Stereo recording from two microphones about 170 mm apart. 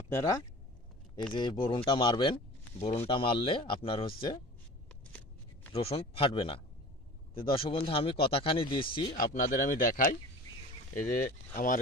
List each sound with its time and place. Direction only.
0.1 s speech: 15° left (ahead or behind)
1.3 s speech: 30° left (ahead or behind)
5.7 s speech: 35° left (ahead or behind)
9.1 s speech: 55° left (ahead or behind)